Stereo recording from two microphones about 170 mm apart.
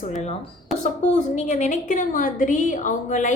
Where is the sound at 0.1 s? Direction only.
45° left (ahead or behind).